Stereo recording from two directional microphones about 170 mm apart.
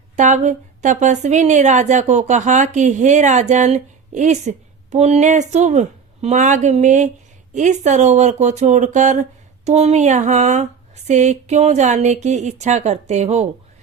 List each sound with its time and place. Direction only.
0.2 s a woman's voice: 45° right (ahead or behind)